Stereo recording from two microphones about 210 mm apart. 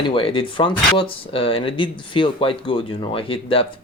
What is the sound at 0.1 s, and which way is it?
Speech, 25° left (ahead or behind).